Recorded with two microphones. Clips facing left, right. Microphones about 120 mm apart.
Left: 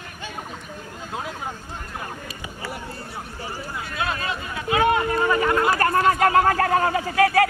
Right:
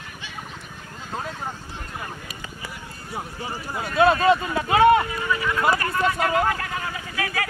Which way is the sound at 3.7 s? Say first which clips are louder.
Right 11 dB; 35° right (ahead or behind).